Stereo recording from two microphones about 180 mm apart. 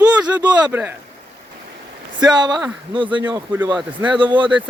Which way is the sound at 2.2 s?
25° right (ahead or behind).